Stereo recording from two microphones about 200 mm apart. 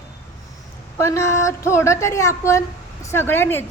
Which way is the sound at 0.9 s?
15° left (ahead or behind).